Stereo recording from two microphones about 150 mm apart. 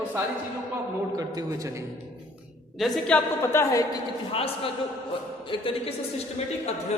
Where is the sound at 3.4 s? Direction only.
15° left (ahead or behind).